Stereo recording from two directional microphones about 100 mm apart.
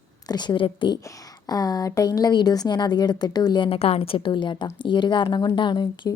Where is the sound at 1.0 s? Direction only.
40° left (ahead or behind).